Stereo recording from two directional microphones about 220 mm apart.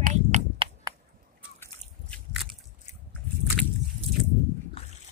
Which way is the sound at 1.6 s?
5° left (ahead or behind).